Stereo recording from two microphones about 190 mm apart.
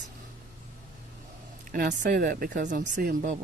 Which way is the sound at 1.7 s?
45° right (ahead or behind).